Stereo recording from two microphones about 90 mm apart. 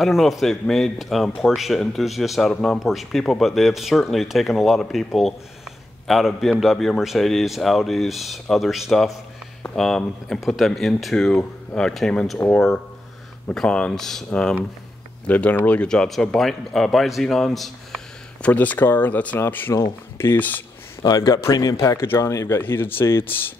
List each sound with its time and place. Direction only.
0.0 s a man's voice: centre (ahead or behind)
18.4 s speech: 15° left (ahead or behind)
21.0 s speech: 45° left (ahead or behind)
21.7 s speech: 30° left (ahead or behind)
22.6 s speech: 25° left (ahead or behind)